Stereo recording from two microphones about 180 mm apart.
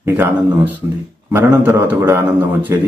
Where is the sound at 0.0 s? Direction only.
10° right (ahead or behind).